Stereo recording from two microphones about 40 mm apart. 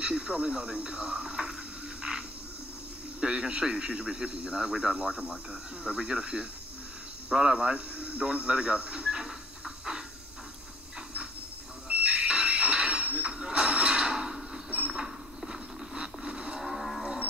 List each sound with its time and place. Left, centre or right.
0.0 s speech: right
2.1 s frog: right
3.2 s speech: right
11.9 s a sound: right
15.4 s a sound: centre
16.6 s livestock: centre